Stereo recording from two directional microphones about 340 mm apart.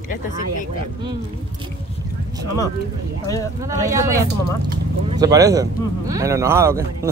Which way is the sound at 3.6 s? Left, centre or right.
Centre.